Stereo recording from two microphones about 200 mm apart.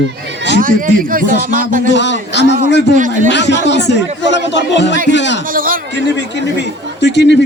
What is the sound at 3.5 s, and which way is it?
A man's voice, 60° left (ahead or behind).